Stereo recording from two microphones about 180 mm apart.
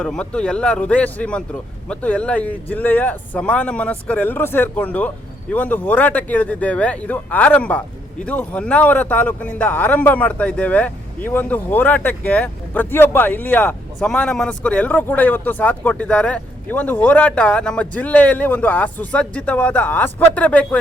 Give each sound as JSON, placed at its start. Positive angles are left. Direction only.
{"t": 0.0, "sound": "speech", "side_deg": 5}